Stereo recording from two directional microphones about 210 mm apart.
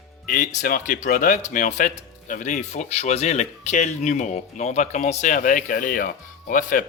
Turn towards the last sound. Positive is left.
turn(degrees=40)  # may be behind; listen again after turning